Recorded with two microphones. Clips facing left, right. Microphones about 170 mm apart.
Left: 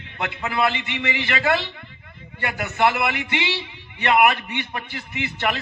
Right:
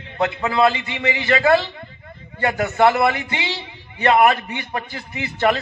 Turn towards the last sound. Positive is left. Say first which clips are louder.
# right 6 dB
turn(degrees=-40)  # may be behind; listen again after turning